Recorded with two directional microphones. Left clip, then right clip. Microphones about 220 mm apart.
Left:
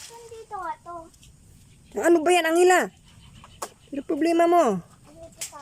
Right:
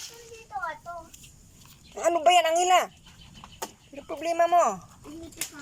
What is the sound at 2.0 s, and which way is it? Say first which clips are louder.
Speech: left 1 dB; 25° left (ahead or behind).